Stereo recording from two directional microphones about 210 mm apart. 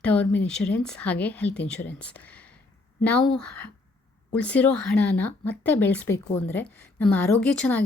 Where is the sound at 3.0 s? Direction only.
5° left (ahead or behind).